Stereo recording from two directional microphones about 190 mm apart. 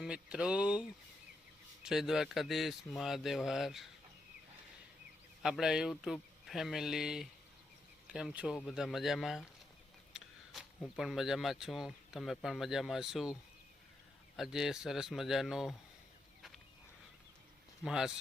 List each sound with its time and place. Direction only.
0.0 s a man's voice: 5° right (ahead or behind)
5.4 s a man's voice: centre (ahead or behind)
10.1 s a sound: 5° right (ahead or behind)
10.9 s a man's voice: centre (ahead or behind)
14.3 s a man's voice: centre (ahead or behind)
17.8 s a man's voice: centre (ahead or behind)